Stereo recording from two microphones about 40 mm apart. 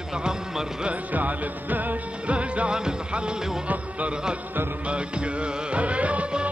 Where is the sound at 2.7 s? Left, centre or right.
Centre.